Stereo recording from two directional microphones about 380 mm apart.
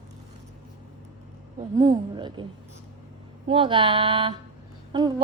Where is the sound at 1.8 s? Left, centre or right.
Centre.